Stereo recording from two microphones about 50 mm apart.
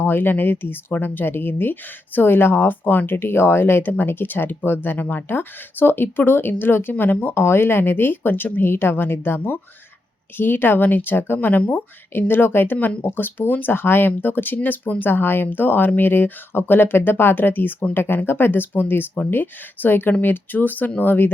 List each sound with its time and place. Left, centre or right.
0.0 s speech: left